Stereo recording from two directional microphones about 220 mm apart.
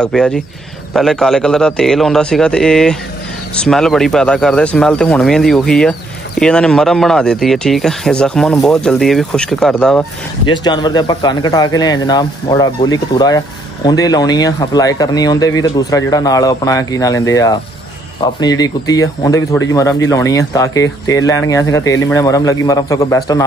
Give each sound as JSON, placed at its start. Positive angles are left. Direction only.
{"t": 0.0, "sound": "speech", "side_deg": 5}
{"t": 10.5, "sound": "speech", "side_deg": 20}